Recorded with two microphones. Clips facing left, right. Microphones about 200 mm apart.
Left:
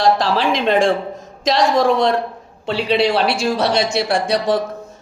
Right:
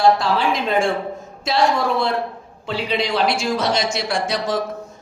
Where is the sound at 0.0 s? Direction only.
90° left.